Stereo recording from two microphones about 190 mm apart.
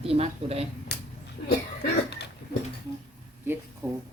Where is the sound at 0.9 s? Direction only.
60° left (ahead or behind).